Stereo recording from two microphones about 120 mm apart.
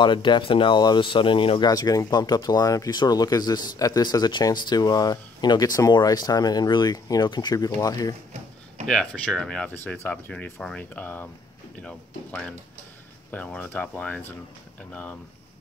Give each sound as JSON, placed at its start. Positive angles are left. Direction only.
{"t": 0.0, "sound": "speech", "side_deg": 40}
{"t": 1.7, "sound": "speech", "side_deg": 30}
{"t": 8.8, "sound": "speech", "side_deg": 5}